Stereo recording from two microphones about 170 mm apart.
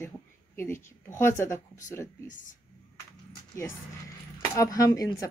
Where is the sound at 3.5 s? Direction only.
15° left (ahead or behind).